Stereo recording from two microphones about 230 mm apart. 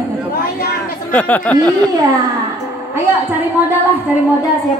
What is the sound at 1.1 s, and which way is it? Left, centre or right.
Speech, centre.